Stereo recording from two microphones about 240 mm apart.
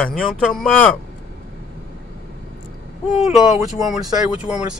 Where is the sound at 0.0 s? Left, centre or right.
Centre.